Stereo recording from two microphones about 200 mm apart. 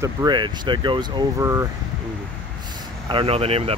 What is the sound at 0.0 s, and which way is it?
Speech, 20° right (ahead or behind).